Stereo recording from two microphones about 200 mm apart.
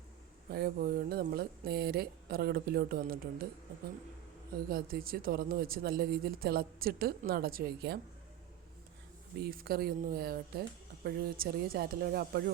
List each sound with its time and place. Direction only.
0.5 s speech: 50° right (ahead or behind)
4.5 s speech: 45° right (ahead or behind)
9.4 s speech: 50° right (ahead or behind)